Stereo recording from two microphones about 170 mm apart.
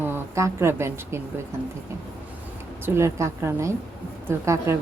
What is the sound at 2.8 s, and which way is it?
Speech, 15° right (ahead or behind).